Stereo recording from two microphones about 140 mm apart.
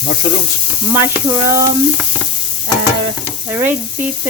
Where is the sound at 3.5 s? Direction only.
15° right (ahead or behind).